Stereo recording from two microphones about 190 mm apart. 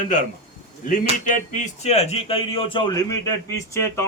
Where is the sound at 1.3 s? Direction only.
40° left (ahead or behind); by 4.1 s 15° left (ahead or behind).